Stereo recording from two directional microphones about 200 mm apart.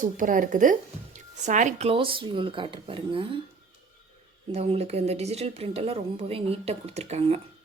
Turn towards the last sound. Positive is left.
turn(degrees=-30)  # may be behind; listen again after turning